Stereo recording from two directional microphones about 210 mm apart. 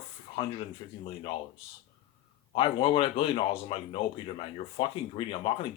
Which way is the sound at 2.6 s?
25° left (ahead or behind).